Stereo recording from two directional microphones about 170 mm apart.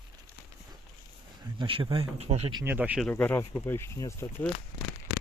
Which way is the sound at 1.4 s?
30° right (ahead or behind).